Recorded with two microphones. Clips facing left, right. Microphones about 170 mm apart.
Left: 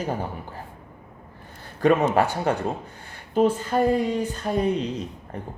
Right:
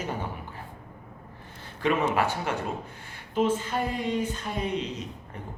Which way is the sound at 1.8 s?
40° left (ahead or behind).